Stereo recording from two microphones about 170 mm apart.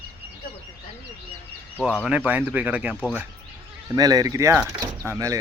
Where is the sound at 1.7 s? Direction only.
10° left (ahead or behind).